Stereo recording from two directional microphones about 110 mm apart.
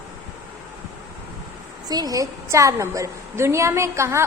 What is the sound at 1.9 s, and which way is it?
A woman's voice, 35° right (ahead or behind).